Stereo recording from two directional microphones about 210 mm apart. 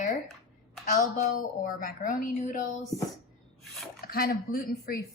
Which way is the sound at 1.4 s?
40° left (ahead or behind).